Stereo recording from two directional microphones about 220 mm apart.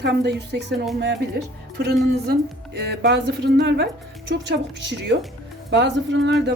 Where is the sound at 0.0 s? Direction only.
50° right (ahead or behind).